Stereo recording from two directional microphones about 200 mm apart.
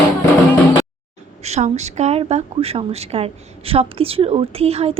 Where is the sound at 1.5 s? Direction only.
35° right (ahead or behind).